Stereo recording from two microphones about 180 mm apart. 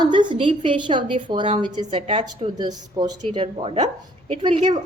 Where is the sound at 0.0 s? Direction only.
25° right (ahead or behind).